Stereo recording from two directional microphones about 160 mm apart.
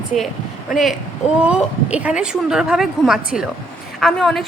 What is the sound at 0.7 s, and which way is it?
A woman's voice, centre (ahead or behind).